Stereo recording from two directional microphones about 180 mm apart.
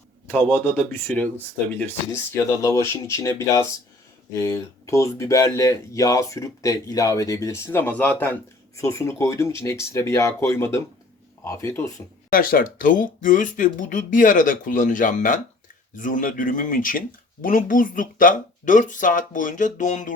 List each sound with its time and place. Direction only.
0.3 s speech: 10° left (ahead or behind)
2.6 s speech: 15° left (ahead or behind)
12.3 s speech: 50° left (ahead or behind)